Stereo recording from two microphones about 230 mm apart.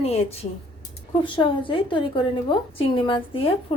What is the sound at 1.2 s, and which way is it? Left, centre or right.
A woman's voice, left.